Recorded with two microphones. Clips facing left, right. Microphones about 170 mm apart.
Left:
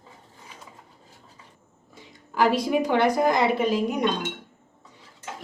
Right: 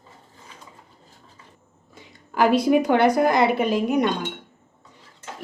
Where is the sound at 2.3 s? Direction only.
60° right (ahead or behind).